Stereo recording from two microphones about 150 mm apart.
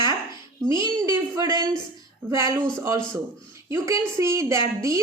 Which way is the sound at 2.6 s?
5° left (ahead or behind).